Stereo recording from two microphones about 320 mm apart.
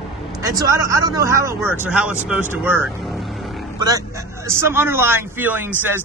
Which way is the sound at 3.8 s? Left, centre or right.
Centre.